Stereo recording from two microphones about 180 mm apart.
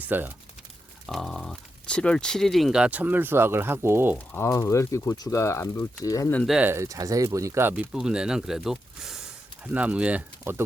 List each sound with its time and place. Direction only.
0.0 s speech: 10° right (ahead or behind)
1.0 s speech: centre (ahead or behind)
4.3 s speech: 15° left (ahead or behind)
6.4 s speech: 5° right (ahead or behind)